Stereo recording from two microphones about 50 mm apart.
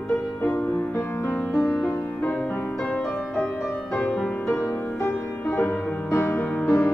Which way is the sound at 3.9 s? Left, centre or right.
Left.